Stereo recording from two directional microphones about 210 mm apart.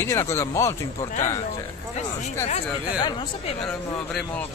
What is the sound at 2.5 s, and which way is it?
Speech, 30° left (ahead or behind).